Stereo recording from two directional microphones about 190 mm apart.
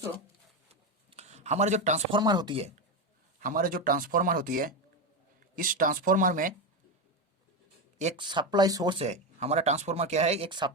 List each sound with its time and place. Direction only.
0.7 s a sound: 35° right (ahead or behind)
2.1 s speech: 20° right (ahead or behind)
3.4 s speech: 45° right (ahead or behind)
7.9 s speech: 35° right (ahead or behind)
8.2 s speech: 25° right (ahead or behind)